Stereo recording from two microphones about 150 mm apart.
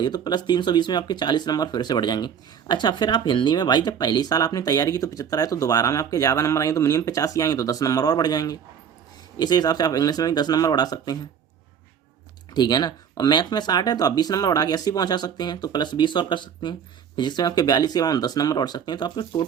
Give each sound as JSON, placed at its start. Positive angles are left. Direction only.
{"t": 0.0, "sound": "speech", "side_deg": 30}
{"t": 12.5, "sound": "speech", "side_deg": 25}